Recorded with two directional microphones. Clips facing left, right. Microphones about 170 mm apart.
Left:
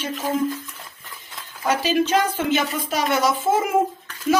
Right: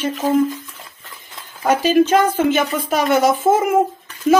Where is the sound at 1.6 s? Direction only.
50° right (ahead or behind).